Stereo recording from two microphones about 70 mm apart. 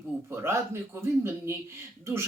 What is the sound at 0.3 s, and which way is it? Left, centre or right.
Speech, right.